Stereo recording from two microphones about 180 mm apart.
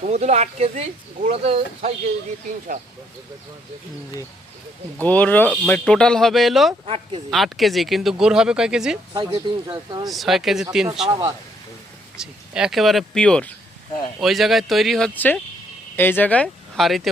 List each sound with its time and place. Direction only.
0.0 s speech: 40° right (ahead or behind)
5.0 s speech: 10° left (ahead or behind)
6.8 s speech: 35° right (ahead or behind)
7.3 s speech: centre (ahead or behind)
9.1 s speech: 25° right (ahead or behind)
10.1 s speech: centre (ahead or behind)
12.1 s speech: 5° right (ahead or behind)